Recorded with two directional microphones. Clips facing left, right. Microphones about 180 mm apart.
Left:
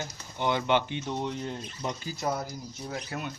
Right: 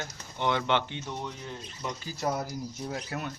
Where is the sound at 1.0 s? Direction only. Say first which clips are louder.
Left 5 dB; 25° left (ahead or behind).